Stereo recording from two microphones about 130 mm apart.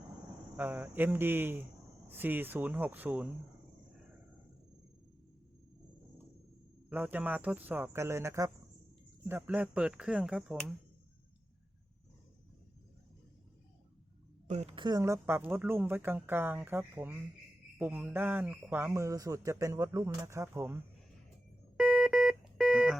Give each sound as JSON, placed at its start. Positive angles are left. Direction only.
{"t": 0.5, "sound": "speech", "side_deg": -15}
{"t": 6.9, "sound": "speech", "side_deg": -15}
{"t": 14.4, "sound": "a woman's voice", "side_deg": -60}
{"t": 14.8, "sound": "speech", "side_deg": -30}
{"t": 21.8, "sound": "music", "side_deg": -5}